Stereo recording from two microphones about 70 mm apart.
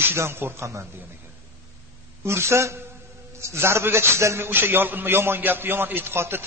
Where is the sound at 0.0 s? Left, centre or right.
Right.